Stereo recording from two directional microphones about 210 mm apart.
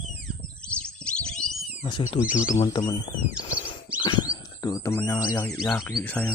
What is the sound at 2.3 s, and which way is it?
Speech, 35° left (ahead or behind).